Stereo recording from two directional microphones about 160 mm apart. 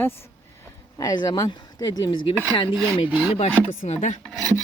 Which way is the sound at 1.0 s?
25° left (ahead or behind).